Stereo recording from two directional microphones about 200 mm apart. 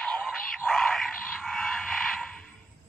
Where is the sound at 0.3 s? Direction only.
Centre (ahead or behind).